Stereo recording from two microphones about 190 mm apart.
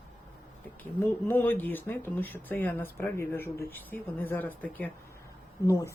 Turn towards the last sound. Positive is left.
turn(degrees=15)  # may be behind; listen again after turning